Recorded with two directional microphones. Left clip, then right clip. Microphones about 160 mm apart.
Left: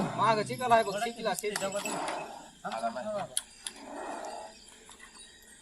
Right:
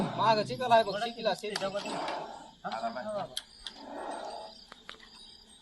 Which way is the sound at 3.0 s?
Centre (ahead or behind).